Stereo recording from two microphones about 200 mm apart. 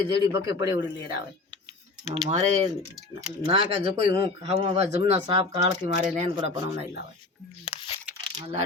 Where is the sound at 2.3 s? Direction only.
30° right (ahead or behind).